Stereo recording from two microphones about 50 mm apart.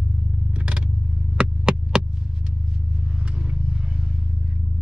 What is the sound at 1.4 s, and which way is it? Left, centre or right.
Hum, centre.